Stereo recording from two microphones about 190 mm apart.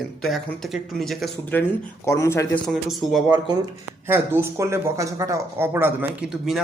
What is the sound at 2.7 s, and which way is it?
Speech, centre (ahead or behind).